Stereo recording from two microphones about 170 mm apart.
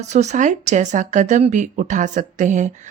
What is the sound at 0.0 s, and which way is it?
Speech, 40° right (ahead or behind).